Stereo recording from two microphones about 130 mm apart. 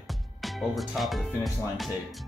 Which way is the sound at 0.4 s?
Centre (ahead or behind).